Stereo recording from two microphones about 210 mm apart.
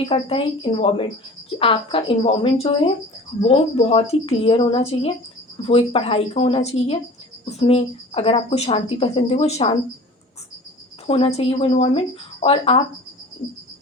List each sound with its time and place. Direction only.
0.0 s speech: 25° left (ahead or behind)
11.0 s speech: 25° left (ahead or behind)